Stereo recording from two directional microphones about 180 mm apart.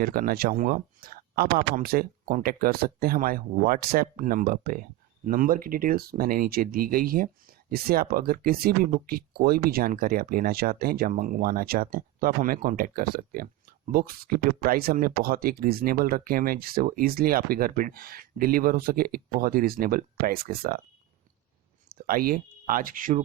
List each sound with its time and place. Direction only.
0.0 s speech: 55° right (ahead or behind)
21.8 s speech: 50° right (ahead or behind)